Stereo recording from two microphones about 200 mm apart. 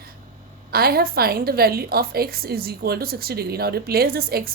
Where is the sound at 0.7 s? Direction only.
50° right (ahead or behind).